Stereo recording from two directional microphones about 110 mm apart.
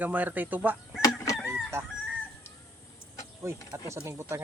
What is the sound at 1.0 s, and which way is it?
Chicken, 35° left (ahead or behind).